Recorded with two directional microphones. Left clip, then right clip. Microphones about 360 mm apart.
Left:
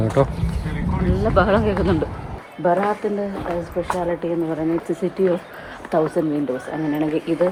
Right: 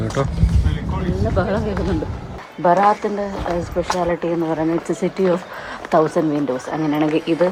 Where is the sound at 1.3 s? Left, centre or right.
Centre.